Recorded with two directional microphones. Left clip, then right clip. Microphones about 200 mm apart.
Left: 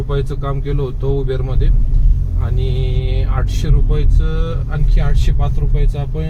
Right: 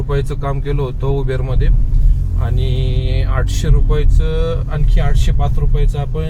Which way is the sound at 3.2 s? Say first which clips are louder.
Right 3 dB; 25° right (ahead or behind).